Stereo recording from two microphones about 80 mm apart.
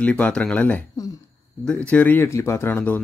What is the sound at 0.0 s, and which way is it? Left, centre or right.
Speech, centre.